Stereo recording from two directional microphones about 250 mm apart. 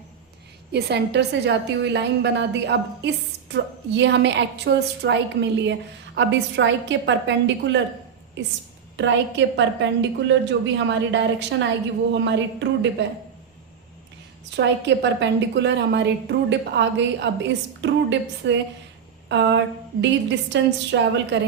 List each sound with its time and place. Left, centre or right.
0.7 s a woman's voice: right
9.0 s a woman's voice: right
14.5 s a woman's voice: right